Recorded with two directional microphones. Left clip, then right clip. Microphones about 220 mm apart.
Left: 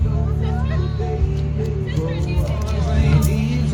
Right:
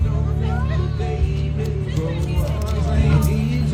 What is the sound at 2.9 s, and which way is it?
Speech, 10° right (ahead or behind).